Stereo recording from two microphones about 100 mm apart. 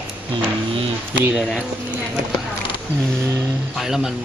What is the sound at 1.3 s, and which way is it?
Speech, 5° right (ahead or behind).